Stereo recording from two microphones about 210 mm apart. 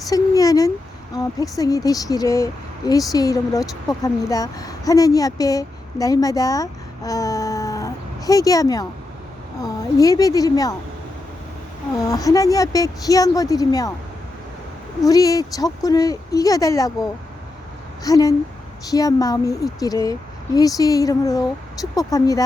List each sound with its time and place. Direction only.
0.1 s speech: 15° left (ahead or behind)
12.0 s speech: 15° left (ahead or behind)
15.0 s speech: 15° left (ahead or behind)
18.0 s speech: 15° left (ahead or behind)